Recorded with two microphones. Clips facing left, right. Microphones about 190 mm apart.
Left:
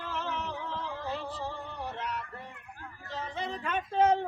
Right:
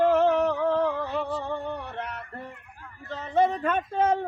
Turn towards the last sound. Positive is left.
turn(degrees=-50)  # may be behind; listen again after turning